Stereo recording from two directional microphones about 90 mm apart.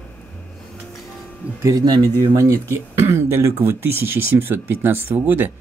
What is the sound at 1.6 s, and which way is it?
Speech, 40° right (ahead or behind).